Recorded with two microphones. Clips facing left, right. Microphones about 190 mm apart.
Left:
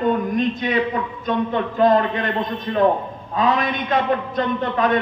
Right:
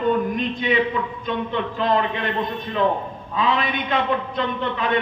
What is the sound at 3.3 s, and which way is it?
A man's voice, 45° left (ahead or behind).